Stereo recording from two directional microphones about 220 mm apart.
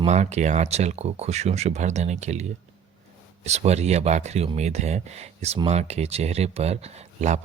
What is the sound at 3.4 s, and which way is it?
Speech, 30° right (ahead or behind).